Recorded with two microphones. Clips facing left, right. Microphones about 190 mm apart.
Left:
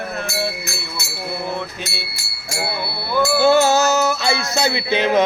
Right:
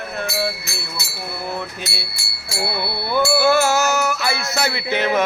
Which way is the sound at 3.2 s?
20° left (ahead or behind).